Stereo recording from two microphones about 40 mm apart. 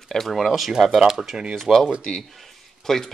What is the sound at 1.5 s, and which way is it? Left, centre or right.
Speech, centre.